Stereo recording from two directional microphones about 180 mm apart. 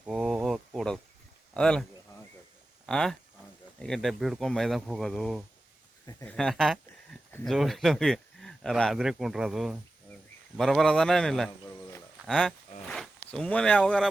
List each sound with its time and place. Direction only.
0.0 s a sound: centre (ahead or behind)
1.5 s speech: 5° left (ahead or behind)
6.1 s speech: 15° left (ahead or behind)
6.3 s speech: centre (ahead or behind)